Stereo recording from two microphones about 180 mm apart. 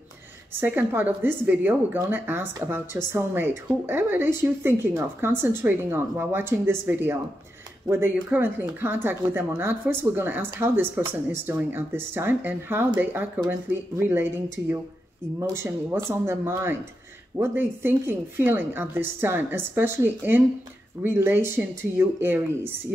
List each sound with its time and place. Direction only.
0.6 s speech: 10° right (ahead or behind)